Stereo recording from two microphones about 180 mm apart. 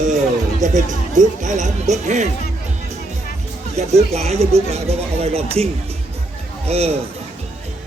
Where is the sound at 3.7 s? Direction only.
35° right (ahead or behind).